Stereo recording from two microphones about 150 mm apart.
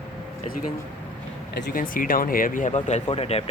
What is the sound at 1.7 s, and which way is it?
Speech, 65° left (ahead or behind).